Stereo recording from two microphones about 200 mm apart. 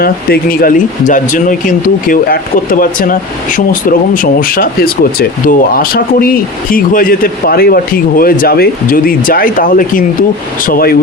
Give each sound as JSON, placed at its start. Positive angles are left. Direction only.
{"t": 0.0, "sound": "speech", "side_deg": 45}